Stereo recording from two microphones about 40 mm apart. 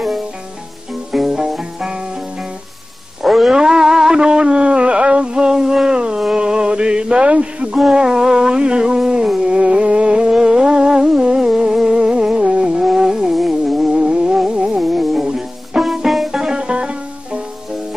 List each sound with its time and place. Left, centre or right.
1.1 s music: centre
3.2 s wild animals: centre
3.5 s a sound: centre
6.3 s music: right
7.9 s music: centre
13.7 s a sound: centre
14.0 s music: right
14.8 s music: centre
15.1 s music: centre
15.8 s music: centre
16.3 s music: centre